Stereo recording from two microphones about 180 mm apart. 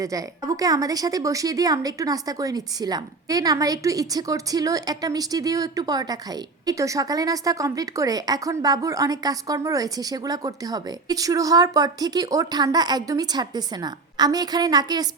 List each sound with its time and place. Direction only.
0.0 s speech: 20° right (ahead or behind)